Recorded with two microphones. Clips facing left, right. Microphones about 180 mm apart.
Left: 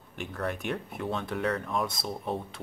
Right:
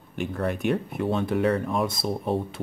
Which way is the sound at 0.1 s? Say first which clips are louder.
Right 6 dB; 5° right (ahead or behind).